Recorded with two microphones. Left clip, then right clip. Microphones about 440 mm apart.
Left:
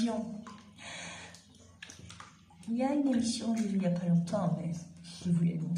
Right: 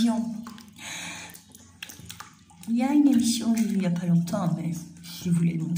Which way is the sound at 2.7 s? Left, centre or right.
Left.